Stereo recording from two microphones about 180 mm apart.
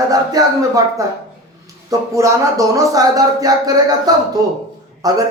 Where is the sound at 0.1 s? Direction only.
20° right (ahead or behind).